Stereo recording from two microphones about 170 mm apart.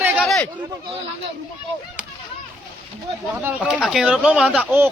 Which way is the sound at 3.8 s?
5° right (ahead or behind).